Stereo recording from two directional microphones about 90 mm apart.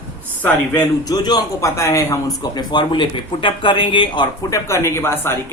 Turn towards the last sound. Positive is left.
turn(degrees=25)  # may be behind; listen again after turning